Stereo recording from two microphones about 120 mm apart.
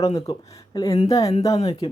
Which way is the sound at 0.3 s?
35° left (ahead or behind).